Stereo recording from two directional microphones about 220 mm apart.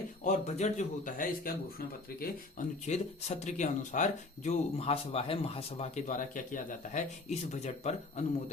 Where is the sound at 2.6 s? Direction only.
30° left (ahead or behind).